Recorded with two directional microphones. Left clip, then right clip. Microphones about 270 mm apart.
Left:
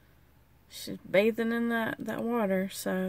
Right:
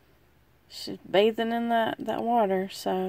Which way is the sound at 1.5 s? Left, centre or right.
Centre.